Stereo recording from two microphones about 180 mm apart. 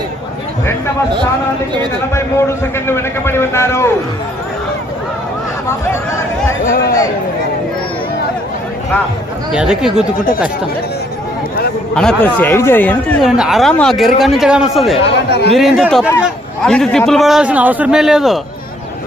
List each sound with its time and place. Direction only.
2.1 s a man's voice: 15° left (ahead or behind)
9.5 s speech: 5° right (ahead or behind)
11.9 s a man's voice: 5° left (ahead or behind)
13.2 s speech: 5° right (ahead or behind)
15.0 s speech: 65° left (ahead or behind)
15.5 s a man's voice: centre (ahead or behind)